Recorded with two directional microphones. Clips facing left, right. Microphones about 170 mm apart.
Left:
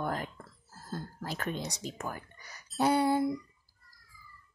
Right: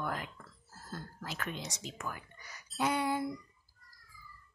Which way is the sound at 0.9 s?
30° left (ahead or behind).